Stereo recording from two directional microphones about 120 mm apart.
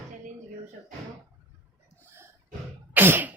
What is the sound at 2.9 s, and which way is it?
Cough, 15° right (ahead or behind).